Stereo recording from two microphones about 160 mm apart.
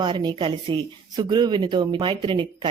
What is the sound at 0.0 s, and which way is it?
Speech, 30° right (ahead or behind).